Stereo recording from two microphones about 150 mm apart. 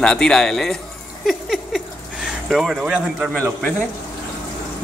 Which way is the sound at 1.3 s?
Centre (ahead or behind).